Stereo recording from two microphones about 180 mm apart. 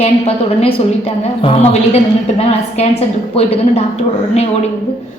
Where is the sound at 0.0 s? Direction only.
30° left (ahead or behind).